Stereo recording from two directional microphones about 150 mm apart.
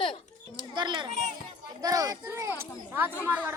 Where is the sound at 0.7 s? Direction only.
30° right (ahead or behind).